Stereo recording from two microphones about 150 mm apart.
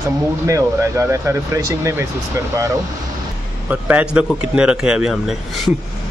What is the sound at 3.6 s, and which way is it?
A man's voice, 10° right (ahead or behind).